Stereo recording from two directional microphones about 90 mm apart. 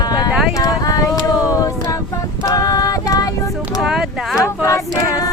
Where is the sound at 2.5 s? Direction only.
40° left (ahead or behind).